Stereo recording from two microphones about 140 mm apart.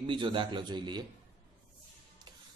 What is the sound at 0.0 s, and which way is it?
Speech, 35° right (ahead or behind).